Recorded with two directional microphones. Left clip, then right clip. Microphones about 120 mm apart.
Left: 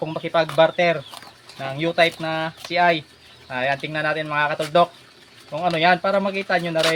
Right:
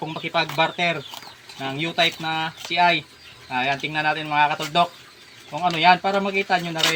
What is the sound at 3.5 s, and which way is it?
Speech, 50° left (ahead or behind).